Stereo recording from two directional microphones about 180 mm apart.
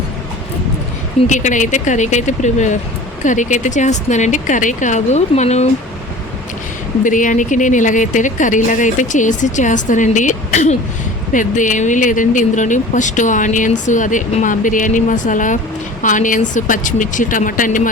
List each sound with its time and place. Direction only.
1.3 s speech: 45° left (ahead or behind)
7.0 s speech: 45° left (ahead or behind)